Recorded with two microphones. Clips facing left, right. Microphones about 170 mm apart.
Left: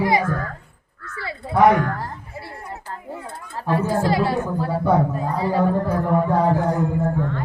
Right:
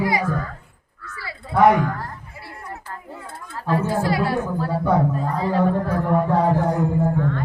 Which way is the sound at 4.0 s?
25° left (ahead or behind).